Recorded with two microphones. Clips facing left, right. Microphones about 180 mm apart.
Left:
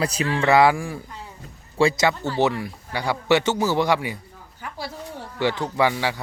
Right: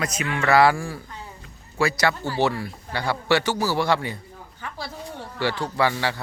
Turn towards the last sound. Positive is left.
turn(degrees=15)  # may be behind; listen again after turning